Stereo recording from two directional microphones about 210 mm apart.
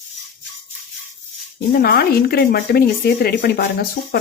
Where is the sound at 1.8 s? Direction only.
50° left (ahead or behind).